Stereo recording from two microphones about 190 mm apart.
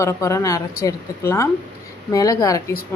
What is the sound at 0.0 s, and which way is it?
Speech, 15° left (ahead or behind).